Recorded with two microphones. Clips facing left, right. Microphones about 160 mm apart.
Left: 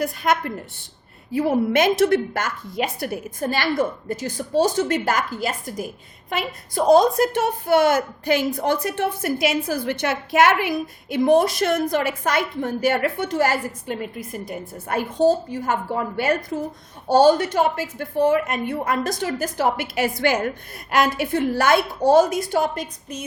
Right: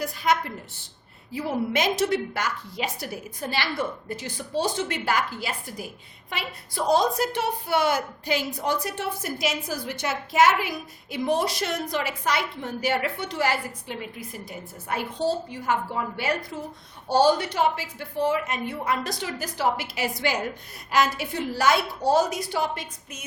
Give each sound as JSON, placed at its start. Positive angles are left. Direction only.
{"t": 0.0, "sound": "a woman's voice", "side_deg": 55}